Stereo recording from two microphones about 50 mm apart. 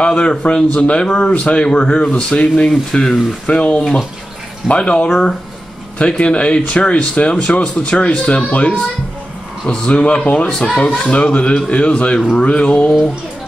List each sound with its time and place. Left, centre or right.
0.0 s speech: left
3.4 s speech: left